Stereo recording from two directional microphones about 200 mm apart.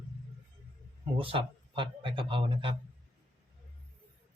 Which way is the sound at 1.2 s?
25° right (ahead or behind).